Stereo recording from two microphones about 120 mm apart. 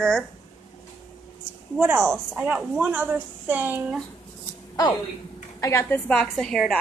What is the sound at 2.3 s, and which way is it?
A woman's voice, 10° right (ahead or behind).